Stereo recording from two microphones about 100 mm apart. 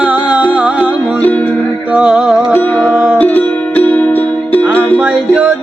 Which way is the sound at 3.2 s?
15° left (ahead or behind).